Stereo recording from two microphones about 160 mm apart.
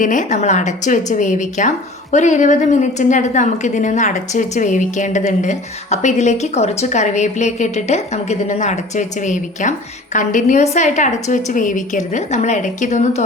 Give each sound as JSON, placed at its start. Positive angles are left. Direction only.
{"t": 0.0, "sound": "a woman's voice", "side_deg": 50}